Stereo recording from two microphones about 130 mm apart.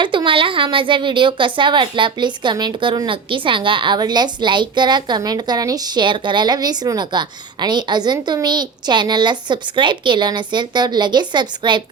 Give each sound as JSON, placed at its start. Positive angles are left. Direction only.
{"t": 0.0, "sound": "speech", "side_deg": -40}